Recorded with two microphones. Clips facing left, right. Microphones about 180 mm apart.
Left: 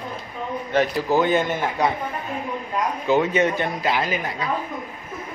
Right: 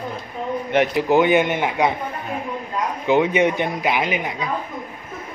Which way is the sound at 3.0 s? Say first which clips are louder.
Right 3 dB; 15° right (ahead or behind).